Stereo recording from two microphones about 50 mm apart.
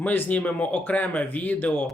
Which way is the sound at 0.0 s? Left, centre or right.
Left.